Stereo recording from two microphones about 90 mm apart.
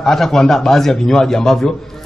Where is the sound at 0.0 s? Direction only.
5° left (ahead or behind).